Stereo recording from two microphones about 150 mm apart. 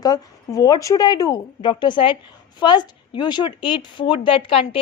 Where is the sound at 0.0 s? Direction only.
25° left (ahead or behind).